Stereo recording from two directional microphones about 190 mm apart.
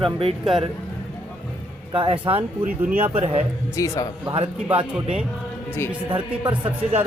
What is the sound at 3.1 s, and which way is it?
Speech, 35° right (ahead or behind).